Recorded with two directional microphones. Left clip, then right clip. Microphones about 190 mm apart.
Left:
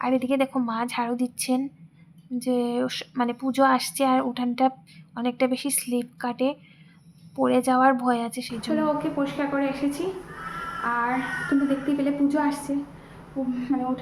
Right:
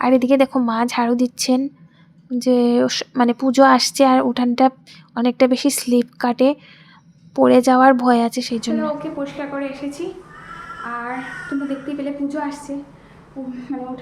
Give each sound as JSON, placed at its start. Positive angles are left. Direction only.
{"t": 0.0, "sound": "a woman's voice", "side_deg": -30}
{"t": 8.7, "sound": "a woman's voice", "side_deg": 0}